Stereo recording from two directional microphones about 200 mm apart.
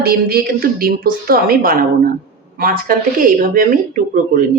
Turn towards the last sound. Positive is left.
turn(degrees=-40)  # may be behind; listen again after turning